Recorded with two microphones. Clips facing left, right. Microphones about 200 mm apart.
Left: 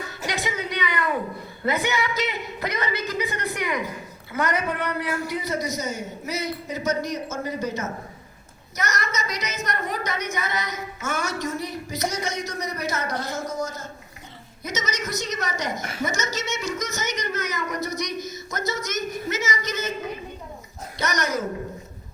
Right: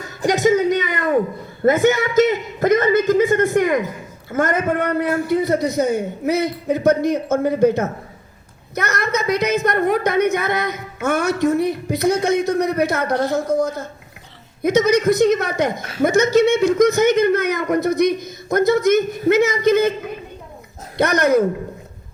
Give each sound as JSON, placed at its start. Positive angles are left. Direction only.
{"t": 0.3, "sound": "a sound", "side_deg": -45}
{"t": 1.6, "sound": "a man's voice", "side_deg": -50}
{"t": 21.0, "sound": "a woman's voice", "side_deg": -55}